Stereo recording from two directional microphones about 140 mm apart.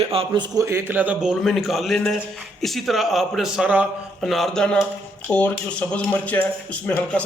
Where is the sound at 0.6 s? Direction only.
15° right (ahead or behind).